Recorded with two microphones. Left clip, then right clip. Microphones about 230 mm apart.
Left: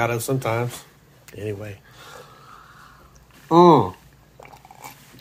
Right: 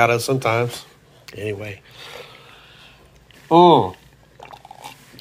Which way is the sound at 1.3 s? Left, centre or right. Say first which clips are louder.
Right 4 dB; centre.